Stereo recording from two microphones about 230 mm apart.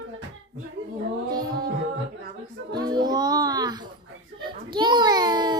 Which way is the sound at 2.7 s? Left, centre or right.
Centre.